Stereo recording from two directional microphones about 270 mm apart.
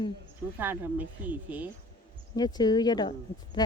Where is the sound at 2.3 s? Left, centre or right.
Centre.